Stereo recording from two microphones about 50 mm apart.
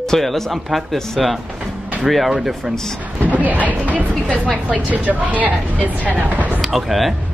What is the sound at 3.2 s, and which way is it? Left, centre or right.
Speech, right.